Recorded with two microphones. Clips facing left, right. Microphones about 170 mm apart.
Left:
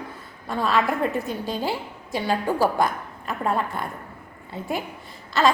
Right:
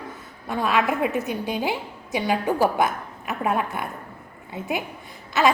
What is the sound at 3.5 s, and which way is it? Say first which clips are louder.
A woman's voice: even; 10° right (ahead or behind).